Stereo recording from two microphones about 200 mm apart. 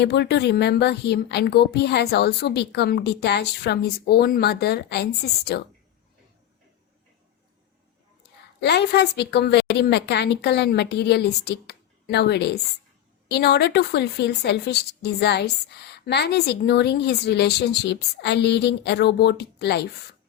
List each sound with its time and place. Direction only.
0.0 s a woman's voice: 55° left (ahead or behind)
8.6 s a woman's voice: 55° left (ahead or behind)